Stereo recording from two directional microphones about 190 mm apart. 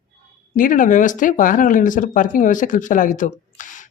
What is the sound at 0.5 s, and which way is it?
Speech, 45° left (ahead or behind).